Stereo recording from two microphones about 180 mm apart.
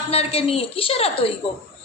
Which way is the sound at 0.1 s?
35° left (ahead or behind).